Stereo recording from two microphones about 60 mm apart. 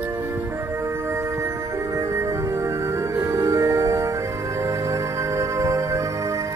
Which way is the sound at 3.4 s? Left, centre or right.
Right.